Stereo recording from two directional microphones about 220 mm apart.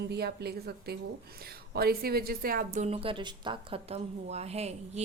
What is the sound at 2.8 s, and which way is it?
A woman's voice, 25° right (ahead or behind).